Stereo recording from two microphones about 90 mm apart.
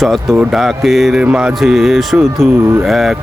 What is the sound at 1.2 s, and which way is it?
Music, 15° right (ahead or behind).